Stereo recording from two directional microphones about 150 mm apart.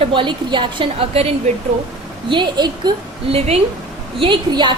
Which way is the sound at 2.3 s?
30° right (ahead or behind).